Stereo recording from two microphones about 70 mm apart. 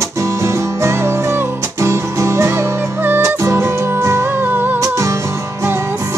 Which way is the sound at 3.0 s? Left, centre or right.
Right.